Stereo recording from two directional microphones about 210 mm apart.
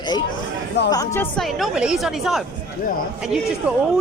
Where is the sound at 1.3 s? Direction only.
Centre (ahead or behind).